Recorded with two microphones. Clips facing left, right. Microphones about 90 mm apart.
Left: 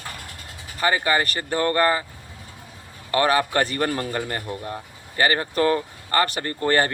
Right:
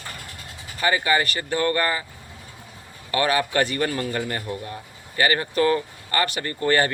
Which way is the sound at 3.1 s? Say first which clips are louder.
Left 2 dB; 35° left (ahead or behind).